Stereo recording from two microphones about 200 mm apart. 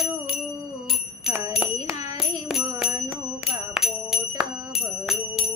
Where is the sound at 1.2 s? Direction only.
5° right (ahead or behind).